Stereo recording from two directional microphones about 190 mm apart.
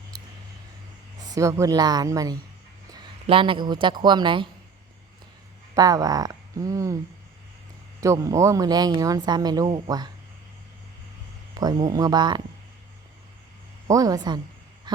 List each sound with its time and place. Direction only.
1.3 s speech: 15° right (ahead or behind)
5.7 s speech: 20° right (ahead or behind)
8.0 s speech: 15° right (ahead or behind)
11.5 s speech: 20° right (ahead or behind)
13.8 s speech: 20° right (ahead or behind)
14.9 s a sound: 25° right (ahead or behind)